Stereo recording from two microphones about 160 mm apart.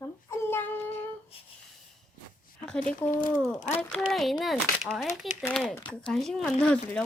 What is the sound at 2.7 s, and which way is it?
A woman's voice, 5° left (ahead or behind).